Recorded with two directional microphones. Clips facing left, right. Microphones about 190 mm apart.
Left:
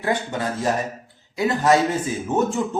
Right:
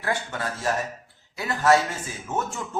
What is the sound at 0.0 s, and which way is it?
Speech, 20° left (ahead or behind).